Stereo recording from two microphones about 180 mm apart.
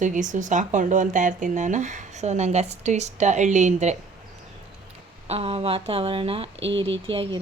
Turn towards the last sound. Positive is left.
turn(degrees=-30)  # may be behind; listen again after turning